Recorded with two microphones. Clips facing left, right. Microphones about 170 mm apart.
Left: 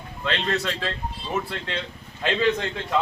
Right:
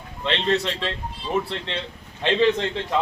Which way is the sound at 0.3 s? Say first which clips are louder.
Right 3 dB; 25° right (ahead or behind).